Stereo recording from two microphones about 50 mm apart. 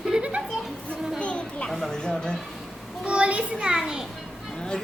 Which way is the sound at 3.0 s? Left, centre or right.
Right.